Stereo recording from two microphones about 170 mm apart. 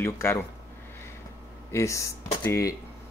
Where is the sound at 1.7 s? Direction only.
15° left (ahead or behind).